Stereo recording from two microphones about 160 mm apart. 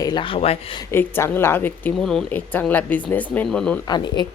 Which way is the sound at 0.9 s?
15° left (ahead or behind).